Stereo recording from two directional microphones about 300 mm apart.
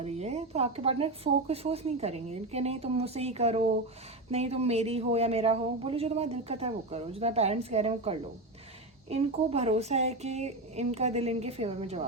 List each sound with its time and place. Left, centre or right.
0.0 s speech: right